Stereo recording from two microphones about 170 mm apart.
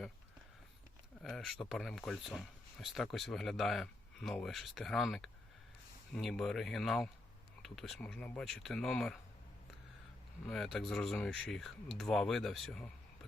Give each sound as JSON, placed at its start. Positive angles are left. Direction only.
{"t": 1.2, "sound": "speech", "side_deg": 0}
{"t": 10.4, "sound": "speech", "side_deg": 0}